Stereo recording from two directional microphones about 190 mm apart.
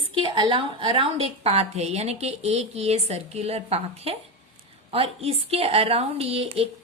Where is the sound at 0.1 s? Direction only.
25° right (ahead or behind).